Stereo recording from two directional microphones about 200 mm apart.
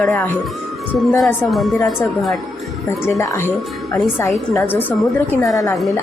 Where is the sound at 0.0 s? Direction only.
5° left (ahead or behind).